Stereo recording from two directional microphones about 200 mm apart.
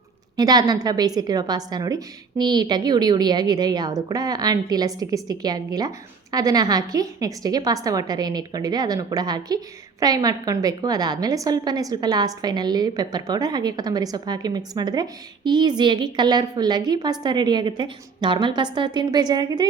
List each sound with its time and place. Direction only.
0.3 s a woman's voice: 20° right (ahead or behind)